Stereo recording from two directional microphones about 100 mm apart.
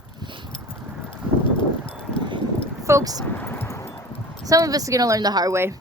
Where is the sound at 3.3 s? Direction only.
20° left (ahead or behind).